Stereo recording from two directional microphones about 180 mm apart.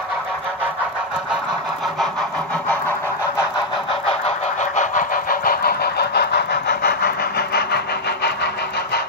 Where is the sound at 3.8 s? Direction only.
35° left (ahead or behind); by 9.0 s 65° left (ahead or behind).